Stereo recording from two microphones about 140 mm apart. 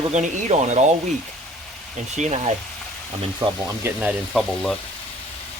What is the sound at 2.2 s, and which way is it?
Frying, 50° right (ahead or behind).